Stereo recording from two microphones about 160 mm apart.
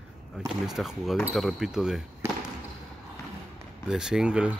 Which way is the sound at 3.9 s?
5° right (ahead or behind).